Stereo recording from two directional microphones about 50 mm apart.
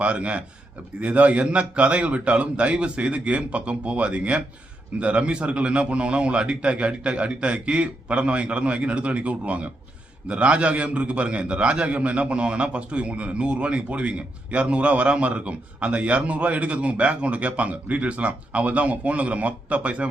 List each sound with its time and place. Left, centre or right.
0.0 s a man's voice: right